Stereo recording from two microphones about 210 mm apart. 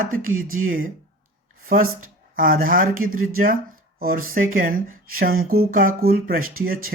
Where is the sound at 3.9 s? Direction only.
45° right (ahead or behind).